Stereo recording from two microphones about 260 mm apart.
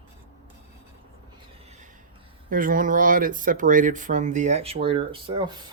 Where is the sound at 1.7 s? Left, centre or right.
Right.